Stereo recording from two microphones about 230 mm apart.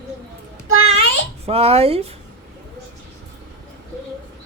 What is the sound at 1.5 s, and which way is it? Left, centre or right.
Speech, right.